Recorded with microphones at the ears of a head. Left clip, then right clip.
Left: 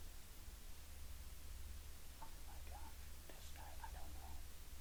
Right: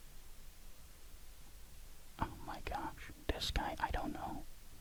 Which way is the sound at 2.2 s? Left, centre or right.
Right.